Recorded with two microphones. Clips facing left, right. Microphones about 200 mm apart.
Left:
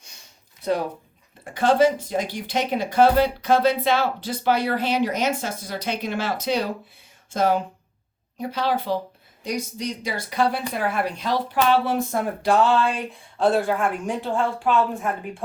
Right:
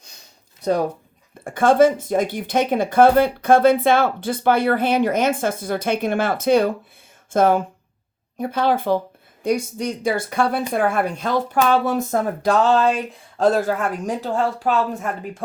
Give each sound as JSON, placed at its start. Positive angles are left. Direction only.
{"t": 0.6, "sound": "speech", "side_deg": -45}